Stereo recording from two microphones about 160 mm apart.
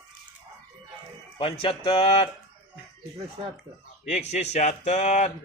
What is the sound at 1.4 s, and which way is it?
Speech, 35° left (ahead or behind).